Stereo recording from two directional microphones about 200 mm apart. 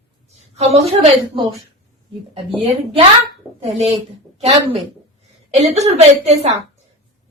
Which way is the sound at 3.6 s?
30° right (ahead or behind).